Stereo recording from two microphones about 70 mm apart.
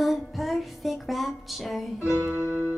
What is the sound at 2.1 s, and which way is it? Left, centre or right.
Music, centre.